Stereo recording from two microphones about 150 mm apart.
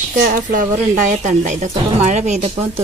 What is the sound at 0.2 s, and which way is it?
A woman's voice, 65° right (ahead or behind).